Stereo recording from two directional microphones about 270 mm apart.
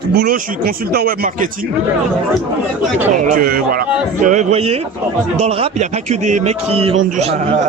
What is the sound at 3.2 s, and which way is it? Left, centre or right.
A man's voice, right.